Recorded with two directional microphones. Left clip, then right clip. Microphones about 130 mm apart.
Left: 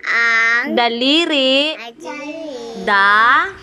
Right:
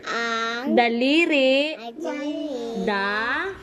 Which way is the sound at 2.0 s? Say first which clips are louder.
Right 3 dB; 60° right (ahead or behind).